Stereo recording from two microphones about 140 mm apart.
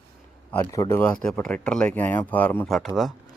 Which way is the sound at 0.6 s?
25° left (ahead or behind).